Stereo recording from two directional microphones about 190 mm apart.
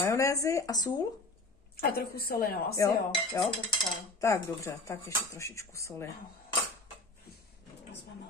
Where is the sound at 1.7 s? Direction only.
50° left (ahead or behind).